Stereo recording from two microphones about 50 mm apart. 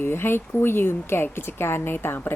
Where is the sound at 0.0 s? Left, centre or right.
Left.